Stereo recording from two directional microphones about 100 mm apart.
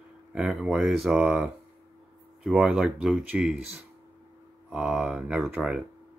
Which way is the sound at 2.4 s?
5° right (ahead or behind).